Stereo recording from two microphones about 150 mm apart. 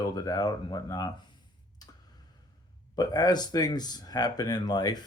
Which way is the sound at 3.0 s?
25° left (ahead or behind).